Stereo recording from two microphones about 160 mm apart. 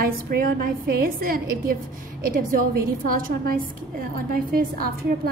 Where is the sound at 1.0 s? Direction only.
65° right (ahead or behind).